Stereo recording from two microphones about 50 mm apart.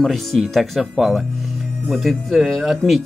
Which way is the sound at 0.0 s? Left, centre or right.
Centre.